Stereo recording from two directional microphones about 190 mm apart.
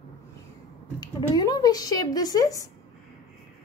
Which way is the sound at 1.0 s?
20° left (ahead or behind).